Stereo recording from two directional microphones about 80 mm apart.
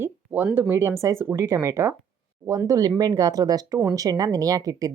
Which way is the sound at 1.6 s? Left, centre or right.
Right.